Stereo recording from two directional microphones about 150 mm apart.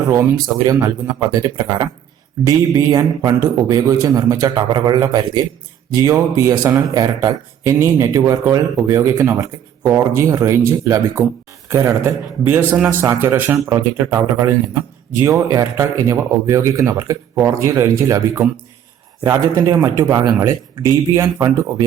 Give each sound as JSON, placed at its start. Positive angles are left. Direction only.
{"t": 0.1, "sound": "a man's voice", "side_deg": -20}
{"t": 15.2, "sound": "a man's voice", "side_deg": -20}